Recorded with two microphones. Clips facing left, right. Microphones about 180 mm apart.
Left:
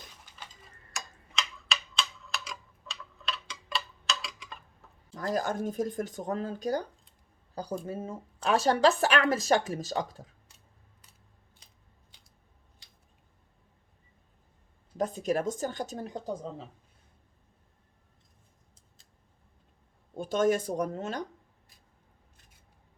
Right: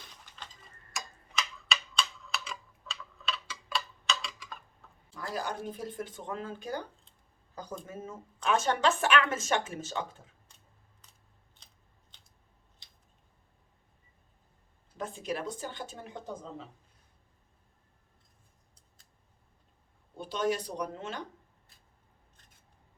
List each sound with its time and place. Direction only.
0.9 s tick-tock: centre (ahead or behind)
5.3 s speech: 45° left (ahead or behind)
14.9 s speech: 40° left (ahead or behind)
20.1 s speech: 45° left (ahead or behind)